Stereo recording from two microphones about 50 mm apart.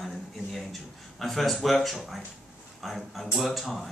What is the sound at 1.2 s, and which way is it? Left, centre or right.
Speech, centre.